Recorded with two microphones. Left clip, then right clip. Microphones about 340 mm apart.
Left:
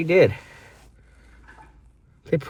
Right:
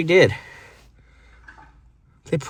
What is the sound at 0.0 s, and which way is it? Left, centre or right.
Speech, right.